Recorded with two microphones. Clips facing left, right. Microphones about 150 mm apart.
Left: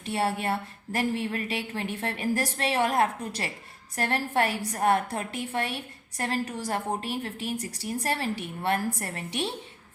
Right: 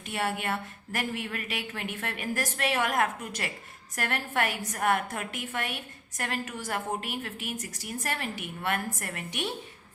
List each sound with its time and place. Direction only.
0.0 s a woman's voice: 30° left (ahead or behind)